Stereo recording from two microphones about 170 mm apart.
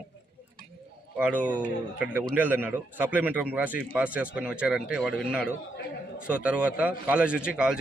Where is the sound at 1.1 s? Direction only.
10° right (ahead or behind).